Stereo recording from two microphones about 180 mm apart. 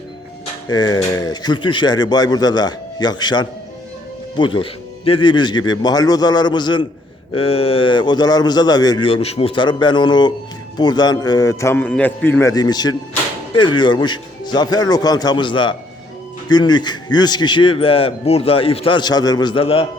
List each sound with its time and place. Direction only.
0.7 s a man's voice: 20° left (ahead or behind)